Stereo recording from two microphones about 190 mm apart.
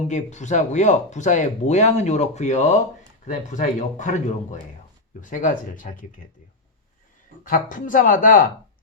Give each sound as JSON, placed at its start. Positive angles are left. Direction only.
{"t": 0.1, "sound": "speech", "side_deg": 40}
{"t": 7.4, "sound": "speech", "side_deg": 45}